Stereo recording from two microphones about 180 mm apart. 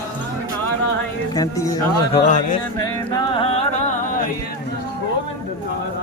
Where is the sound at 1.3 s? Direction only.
20° left (ahead or behind).